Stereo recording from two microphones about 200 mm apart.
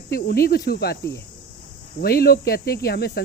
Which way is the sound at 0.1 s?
50° left (ahead or behind).